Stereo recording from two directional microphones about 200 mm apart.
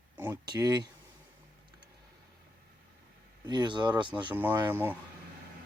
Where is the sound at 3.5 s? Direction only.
20° right (ahead or behind).